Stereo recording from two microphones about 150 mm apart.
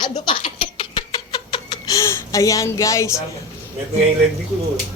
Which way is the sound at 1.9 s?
20° left (ahead or behind).